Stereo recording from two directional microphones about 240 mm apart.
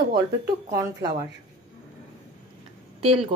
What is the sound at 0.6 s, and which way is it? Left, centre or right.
Speech, centre.